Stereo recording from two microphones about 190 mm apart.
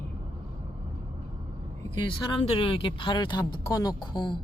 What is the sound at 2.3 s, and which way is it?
Speech, 25° left (ahead or behind).